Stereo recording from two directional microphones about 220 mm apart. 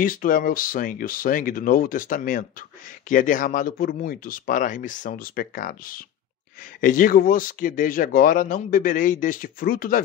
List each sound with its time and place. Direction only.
0.0 s speech: 40° left (ahead or behind)